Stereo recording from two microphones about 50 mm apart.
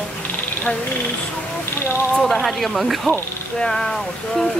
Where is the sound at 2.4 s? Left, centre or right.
Centre.